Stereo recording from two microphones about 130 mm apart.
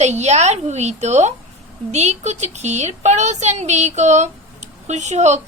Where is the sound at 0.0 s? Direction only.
60° right (ahead or behind).